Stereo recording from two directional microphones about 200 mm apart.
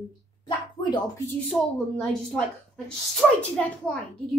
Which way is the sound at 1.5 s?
5° left (ahead or behind).